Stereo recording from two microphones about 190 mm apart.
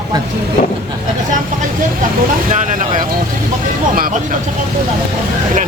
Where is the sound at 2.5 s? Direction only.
45° right (ahead or behind).